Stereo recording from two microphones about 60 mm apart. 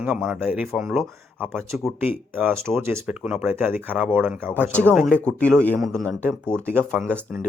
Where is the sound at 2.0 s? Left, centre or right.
Right.